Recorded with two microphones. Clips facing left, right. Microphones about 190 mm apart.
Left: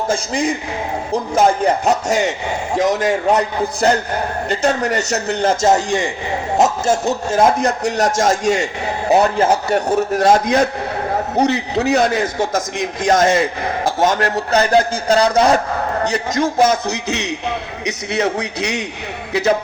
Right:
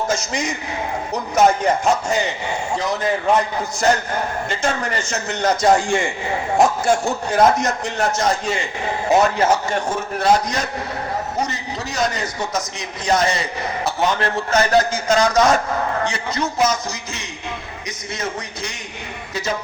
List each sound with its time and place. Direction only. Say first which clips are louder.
0.1 s a man's voice: left 4 dB; 30° left (ahead or behind)
2.0 s speech: left 4 dB; 85° left
3.3 s a man's voice: left 3 dB; 35° left (ahead or behind)
8.2 s a man's voice: left 5 dB; 45° left (ahead or behind)
9.0 s a man's voice: left 2 dB; 35° left (ahead or behind); by 10.7 s 55° left (ahead or behind)
11.3 s a man's voice: left 9 dB; 65° left (ahead or behind); by 15.6 s 35° left (ahead or behind)
16.0 s a man's voice: left 5 dB; 45° left (ahead or behind)
16.6 s a man's voice: left 5 dB; 65° left (ahead or behind)